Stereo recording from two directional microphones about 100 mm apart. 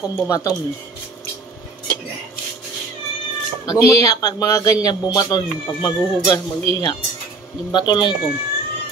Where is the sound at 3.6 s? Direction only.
30° left (ahead or behind).